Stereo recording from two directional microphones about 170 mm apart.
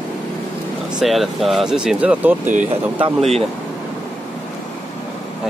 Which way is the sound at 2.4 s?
45° right (ahead or behind).